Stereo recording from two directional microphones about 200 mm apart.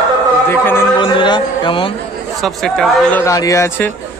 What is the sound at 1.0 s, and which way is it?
Speech, 25° left (ahead or behind).